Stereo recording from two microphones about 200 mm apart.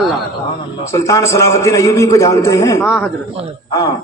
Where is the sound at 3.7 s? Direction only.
20° left (ahead or behind).